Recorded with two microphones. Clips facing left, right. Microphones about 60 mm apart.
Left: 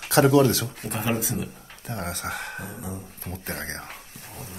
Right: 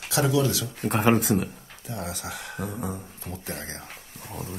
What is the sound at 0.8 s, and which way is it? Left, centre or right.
Speech, right.